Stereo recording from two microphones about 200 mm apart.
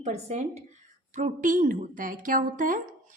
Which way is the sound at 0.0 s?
35° right (ahead or behind).